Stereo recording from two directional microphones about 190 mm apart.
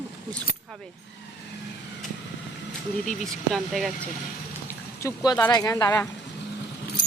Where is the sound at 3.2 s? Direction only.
Centre (ahead or behind).